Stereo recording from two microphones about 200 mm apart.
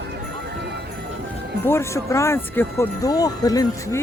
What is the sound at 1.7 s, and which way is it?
Speech, 15° left (ahead or behind).